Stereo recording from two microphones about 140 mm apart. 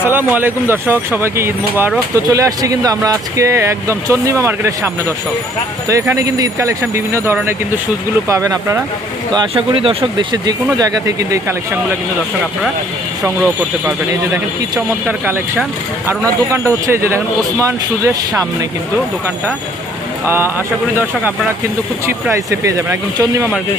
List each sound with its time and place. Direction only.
0.0 s speech: 15° right (ahead or behind)
9.3 s speech: 35° right (ahead or behind)
10.8 s speech: 25° right (ahead or behind)
14.8 s speech: 10° right (ahead or behind)
16.5 s speech: 20° right (ahead or behind)
20.2 s speech: 15° right (ahead or behind)
22.0 s speech: 20° right (ahead or behind)